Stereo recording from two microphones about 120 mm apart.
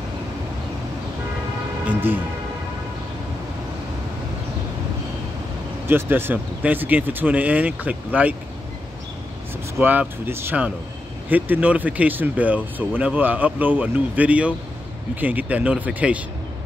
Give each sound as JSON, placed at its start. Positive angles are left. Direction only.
{"t": 1.9, "sound": "speech", "side_deg": -15}
{"t": 5.9, "sound": "speech", "side_deg": -20}
{"t": 9.8, "sound": "speech", "side_deg": -15}